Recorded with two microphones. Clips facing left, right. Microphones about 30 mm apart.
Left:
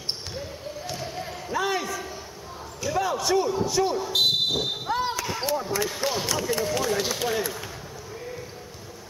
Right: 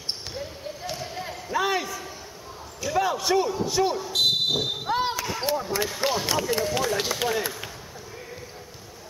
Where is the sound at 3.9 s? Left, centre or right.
Centre.